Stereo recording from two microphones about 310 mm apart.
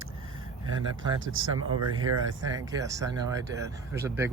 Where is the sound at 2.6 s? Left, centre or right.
Centre.